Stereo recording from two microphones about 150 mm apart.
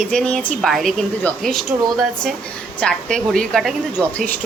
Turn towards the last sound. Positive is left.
turn(degrees=10)  # may be behind; listen again after turning